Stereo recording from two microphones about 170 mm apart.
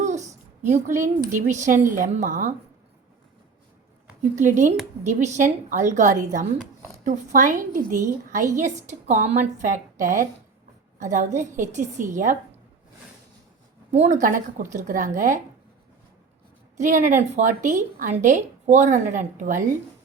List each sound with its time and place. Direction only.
0.0 s a sound: 45° right (ahead or behind)
0.9 s speech: 15° right (ahead or behind)
1.3 s a woman's voice: 45° right (ahead or behind)
4.4 s a woman's voice: 45° right (ahead or behind)
13.9 s a woman's voice: 45° right (ahead or behind)
16.7 s a woman's voice: 50° right (ahead or behind)